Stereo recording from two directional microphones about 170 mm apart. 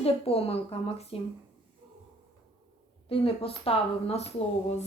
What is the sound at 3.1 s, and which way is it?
A woman's voice, 35° left (ahead or behind).